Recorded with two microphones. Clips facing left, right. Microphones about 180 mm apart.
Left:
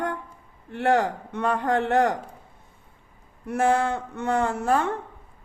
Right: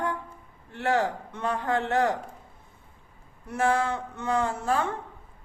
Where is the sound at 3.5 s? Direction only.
55° left (ahead or behind).